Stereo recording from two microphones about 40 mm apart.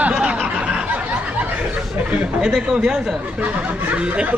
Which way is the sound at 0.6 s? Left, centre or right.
Right.